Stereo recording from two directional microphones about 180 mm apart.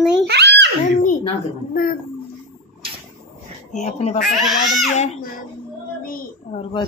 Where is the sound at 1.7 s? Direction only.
55° left (ahead or behind).